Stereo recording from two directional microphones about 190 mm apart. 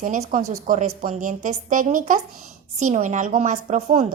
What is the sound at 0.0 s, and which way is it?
A woman's voice, 45° right (ahead or behind).